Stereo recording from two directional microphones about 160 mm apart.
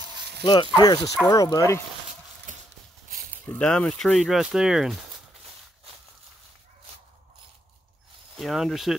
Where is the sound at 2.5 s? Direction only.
55° right (ahead or behind).